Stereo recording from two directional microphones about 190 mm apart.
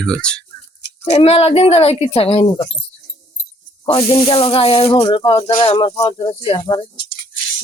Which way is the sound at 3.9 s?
30° left (ahead or behind).